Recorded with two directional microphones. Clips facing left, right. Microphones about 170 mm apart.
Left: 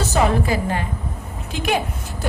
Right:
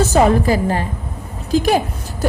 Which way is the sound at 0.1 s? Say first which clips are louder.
Right 5 dB; 40° right (ahead or behind).